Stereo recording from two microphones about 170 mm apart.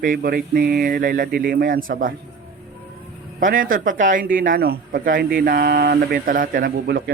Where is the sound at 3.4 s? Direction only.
55° right (ahead or behind).